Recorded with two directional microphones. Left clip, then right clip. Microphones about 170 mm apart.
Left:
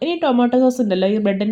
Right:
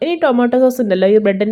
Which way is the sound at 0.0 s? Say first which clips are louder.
Right 4 dB; 25° right (ahead or behind).